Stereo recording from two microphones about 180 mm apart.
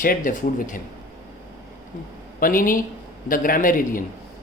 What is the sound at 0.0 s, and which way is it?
Speech, 50° left (ahead or behind).